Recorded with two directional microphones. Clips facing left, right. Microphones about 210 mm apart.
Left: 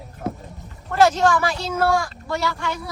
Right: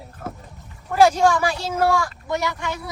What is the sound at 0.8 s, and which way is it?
A woman's voice, 10° right (ahead or behind).